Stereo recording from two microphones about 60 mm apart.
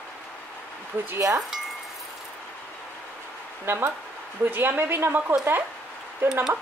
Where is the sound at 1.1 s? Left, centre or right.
Right.